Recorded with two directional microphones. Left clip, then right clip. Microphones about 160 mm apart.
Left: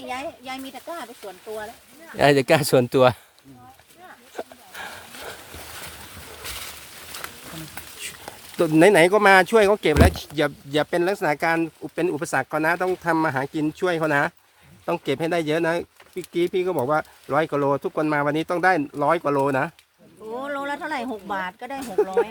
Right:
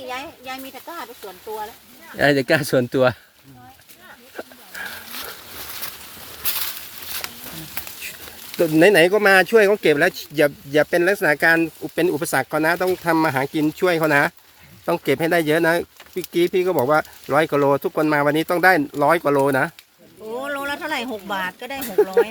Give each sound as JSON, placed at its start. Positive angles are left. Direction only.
{"t": 2.1, "sound": "speech", "side_deg": 25}
{"t": 8.7, "sound": "speech", "side_deg": 25}